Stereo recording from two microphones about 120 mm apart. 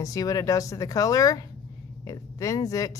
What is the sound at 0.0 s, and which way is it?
Speech, 30° left (ahead or behind).